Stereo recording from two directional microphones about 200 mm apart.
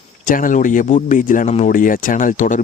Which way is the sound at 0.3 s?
40° left (ahead or behind).